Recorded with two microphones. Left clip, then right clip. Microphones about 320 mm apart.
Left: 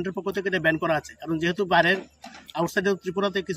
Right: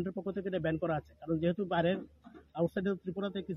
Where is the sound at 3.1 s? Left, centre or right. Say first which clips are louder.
Left 13 dB; centre.